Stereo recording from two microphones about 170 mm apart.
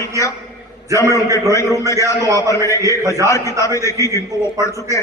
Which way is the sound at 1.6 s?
20° left (ahead or behind).